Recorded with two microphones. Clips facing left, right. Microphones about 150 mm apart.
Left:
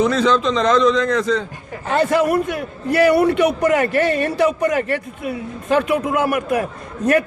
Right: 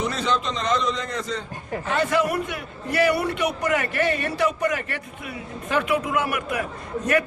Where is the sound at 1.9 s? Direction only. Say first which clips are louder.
Left 6 dB; 40° left (ahead or behind).